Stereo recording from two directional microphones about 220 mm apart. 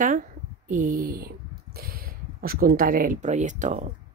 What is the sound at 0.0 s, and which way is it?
Speech, 35° right (ahead or behind).